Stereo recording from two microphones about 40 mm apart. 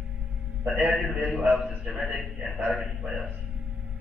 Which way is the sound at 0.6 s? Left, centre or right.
Centre.